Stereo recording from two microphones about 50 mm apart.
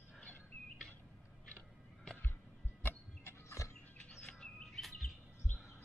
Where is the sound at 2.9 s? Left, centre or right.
Left.